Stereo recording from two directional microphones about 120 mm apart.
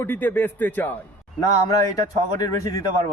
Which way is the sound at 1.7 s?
30° left (ahead or behind).